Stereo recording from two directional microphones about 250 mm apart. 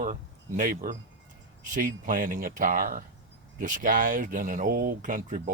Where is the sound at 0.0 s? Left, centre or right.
Right.